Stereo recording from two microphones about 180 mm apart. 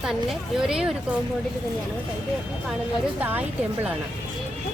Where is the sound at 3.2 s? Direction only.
10° right (ahead or behind).